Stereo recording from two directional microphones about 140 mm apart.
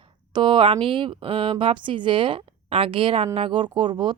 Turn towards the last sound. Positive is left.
turn(degrees=-35)  # may be behind; listen again after turning